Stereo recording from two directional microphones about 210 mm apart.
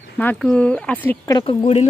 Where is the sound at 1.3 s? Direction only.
25° left (ahead or behind).